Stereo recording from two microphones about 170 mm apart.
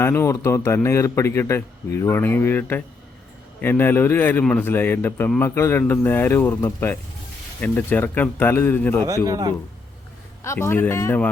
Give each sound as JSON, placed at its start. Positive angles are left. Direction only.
{"t": 0.0, "sound": "a man's voice", "side_deg": 15}
{"t": 9.0, "sound": "a man's voice", "side_deg": -20}
{"t": 10.4, "sound": "a man's voice", "side_deg": 15}